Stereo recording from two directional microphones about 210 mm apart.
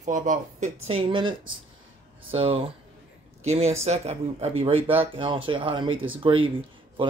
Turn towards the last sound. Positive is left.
turn(degrees=-25)  # may be behind; listen again after turning